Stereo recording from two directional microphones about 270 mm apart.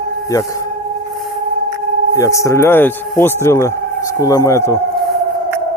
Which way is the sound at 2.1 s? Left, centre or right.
Centre.